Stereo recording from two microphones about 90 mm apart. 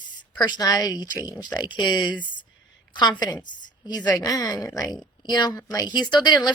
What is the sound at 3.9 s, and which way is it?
A woman's voice, 50° left (ahead or behind).